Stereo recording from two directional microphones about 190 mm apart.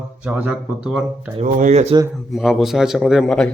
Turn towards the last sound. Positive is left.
turn(degrees=5)  # may be behind; listen again after turning